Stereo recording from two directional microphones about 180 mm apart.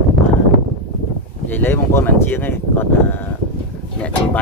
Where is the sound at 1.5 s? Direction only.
10° left (ahead or behind).